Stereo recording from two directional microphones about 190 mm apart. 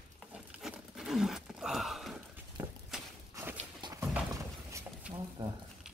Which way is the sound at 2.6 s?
10° right (ahead or behind).